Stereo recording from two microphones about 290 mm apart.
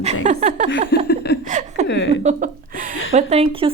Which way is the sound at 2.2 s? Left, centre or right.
Right.